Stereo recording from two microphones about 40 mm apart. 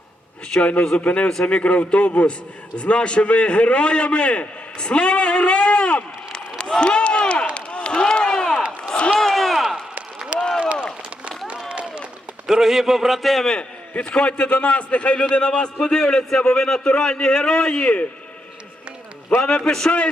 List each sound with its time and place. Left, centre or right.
0.5 s a man's voice: left
6.6 s run: left
7.5 s a sound: left
9.1 s slam: centre
10.3 s a sound: right
11.7 s a sound: right
12.5 s a man's voice: centre
13.4 s a man's voice: centre
16.8 s a man's voice: left
19.6 s a man's voice: centre